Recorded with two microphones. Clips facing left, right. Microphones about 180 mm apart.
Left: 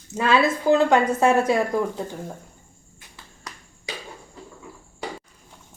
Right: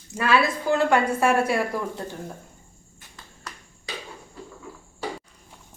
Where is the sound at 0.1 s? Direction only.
25° left (ahead or behind).